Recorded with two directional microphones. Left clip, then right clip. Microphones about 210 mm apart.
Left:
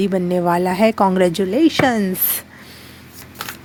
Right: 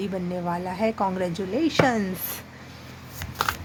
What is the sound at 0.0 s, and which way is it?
Speech, 35° left (ahead or behind).